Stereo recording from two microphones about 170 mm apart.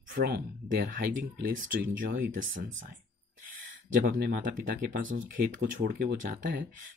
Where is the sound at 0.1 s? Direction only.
60° right (ahead or behind).